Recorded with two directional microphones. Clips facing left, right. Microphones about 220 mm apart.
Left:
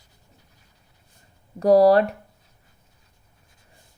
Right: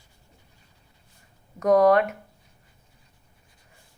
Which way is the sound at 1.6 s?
35° left (ahead or behind).